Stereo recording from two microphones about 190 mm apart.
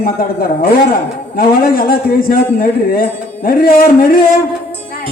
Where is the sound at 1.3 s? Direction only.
50° left (ahead or behind).